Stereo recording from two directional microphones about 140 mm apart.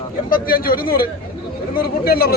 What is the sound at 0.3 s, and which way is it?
A man's voice, 90° left.